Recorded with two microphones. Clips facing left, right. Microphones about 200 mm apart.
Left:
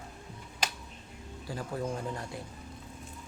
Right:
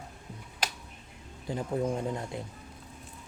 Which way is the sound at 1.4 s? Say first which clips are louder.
Right 5 dB; 20° right (ahead or behind).